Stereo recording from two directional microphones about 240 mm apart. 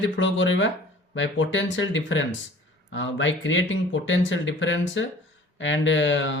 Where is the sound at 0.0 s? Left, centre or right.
Left.